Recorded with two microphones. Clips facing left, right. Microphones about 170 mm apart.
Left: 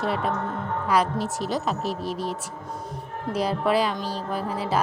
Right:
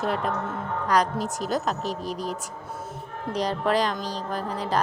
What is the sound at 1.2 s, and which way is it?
Speech, 40° right (ahead or behind).